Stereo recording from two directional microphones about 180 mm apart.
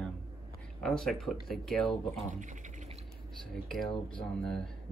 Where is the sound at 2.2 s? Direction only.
45° right (ahead or behind).